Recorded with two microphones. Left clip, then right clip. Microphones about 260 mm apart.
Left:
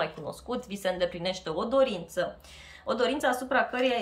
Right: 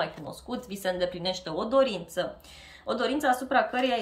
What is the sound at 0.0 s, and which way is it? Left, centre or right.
Speech, centre.